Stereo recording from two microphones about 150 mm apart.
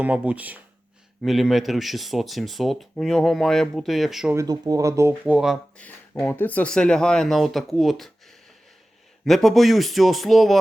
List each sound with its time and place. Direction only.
0.0 s speech: 10° right (ahead or behind)
4.4 s speech: 25° right (ahead or behind); by 5.5 s 5° right (ahead or behind)
5.7 s speech: 10° left (ahead or behind)
9.2 s speech: centre (ahead or behind)